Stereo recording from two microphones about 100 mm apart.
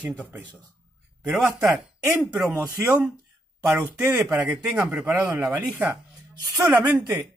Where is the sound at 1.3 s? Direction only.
30° right (ahead or behind).